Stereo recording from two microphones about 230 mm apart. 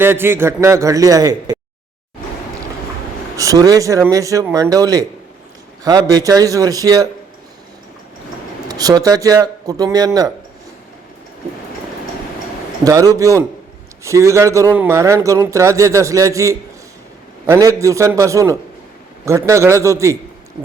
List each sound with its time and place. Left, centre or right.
0.0 s a man's voice: centre
3.3 s a man's voice: centre
8.6 s a man's voice: centre
12.8 s a man's voice: centre